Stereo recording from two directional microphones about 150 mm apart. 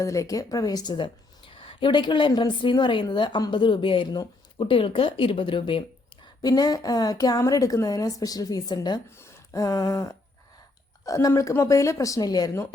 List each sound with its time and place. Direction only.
0.0 s a woman's voice: 20° left (ahead or behind)
9.0 s a sound: 15° left (ahead or behind)
11.0 s a woman's voice: 20° left (ahead or behind)